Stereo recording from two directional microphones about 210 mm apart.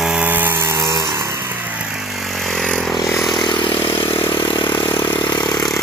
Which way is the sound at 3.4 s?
20° left (ahead or behind).